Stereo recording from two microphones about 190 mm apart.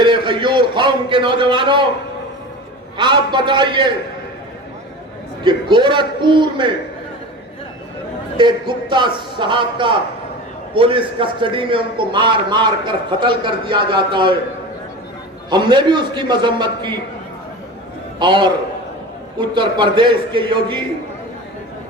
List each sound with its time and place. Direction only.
0.0 s a sound: 25° right (ahead or behind)
3.0 s a man's voice: 25° right (ahead or behind)
5.4 s a man's voice: 25° right (ahead or behind)
8.4 s a man's voice: 25° right (ahead or behind)
15.4 s a man's voice: 25° right (ahead or behind)
18.2 s a man's voice: 25° right (ahead or behind)